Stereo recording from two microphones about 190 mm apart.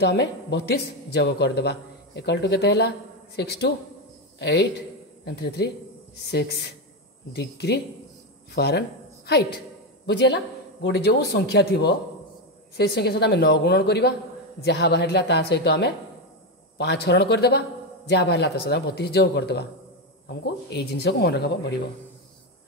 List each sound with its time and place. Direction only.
0.0 s a man's voice: 65° left (ahead or behind)
12.7 s a man's voice: 60° left (ahead or behind)